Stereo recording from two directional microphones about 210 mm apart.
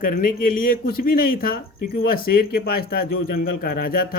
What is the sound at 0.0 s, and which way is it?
Speech, 40° left (ahead or behind).